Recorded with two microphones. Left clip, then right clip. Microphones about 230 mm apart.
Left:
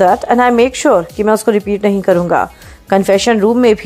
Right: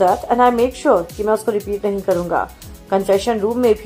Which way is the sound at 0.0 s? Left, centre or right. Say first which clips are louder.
Left 4 dB; left.